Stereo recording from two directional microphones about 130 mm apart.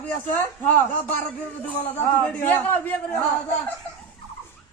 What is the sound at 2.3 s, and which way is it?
Speech, 10° left (ahead or behind).